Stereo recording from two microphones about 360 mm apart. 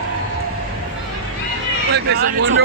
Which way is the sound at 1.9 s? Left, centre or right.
Right.